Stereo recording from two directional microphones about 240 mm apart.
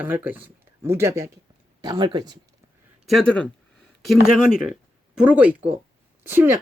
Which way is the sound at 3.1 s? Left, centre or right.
Centre.